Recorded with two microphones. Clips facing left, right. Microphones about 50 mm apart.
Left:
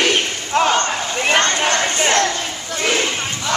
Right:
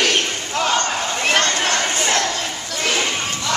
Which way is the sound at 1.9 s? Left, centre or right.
Left.